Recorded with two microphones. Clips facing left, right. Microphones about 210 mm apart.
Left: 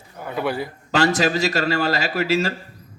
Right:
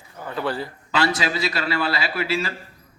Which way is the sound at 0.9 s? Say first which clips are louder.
Left 4 dB; 45° left (ahead or behind).